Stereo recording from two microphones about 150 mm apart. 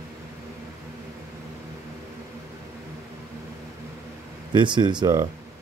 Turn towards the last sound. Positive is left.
turn(degrees=-30)  # may be behind; listen again after turning